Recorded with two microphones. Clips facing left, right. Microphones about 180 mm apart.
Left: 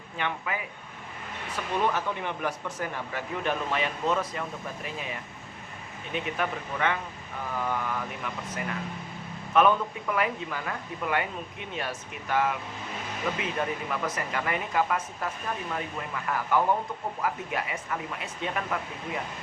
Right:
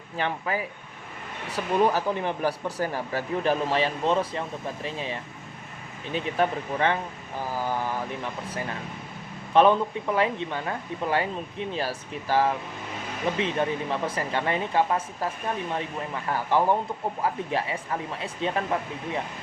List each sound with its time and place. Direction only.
0.2 s speech: 35° right (ahead or behind)